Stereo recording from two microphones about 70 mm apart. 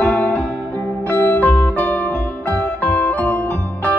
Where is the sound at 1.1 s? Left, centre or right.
Left.